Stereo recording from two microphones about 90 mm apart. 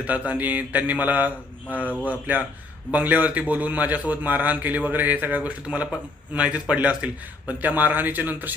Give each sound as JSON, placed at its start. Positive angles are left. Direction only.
{"t": 0.0, "sound": "a man's voice", "side_deg": -15}